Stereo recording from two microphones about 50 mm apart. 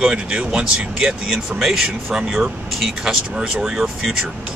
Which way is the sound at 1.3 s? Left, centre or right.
Centre.